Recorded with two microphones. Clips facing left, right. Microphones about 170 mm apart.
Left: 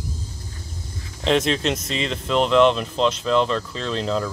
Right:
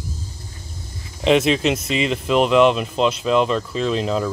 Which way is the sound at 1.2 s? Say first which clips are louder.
Right 4 dB; 5° right (ahead or behind).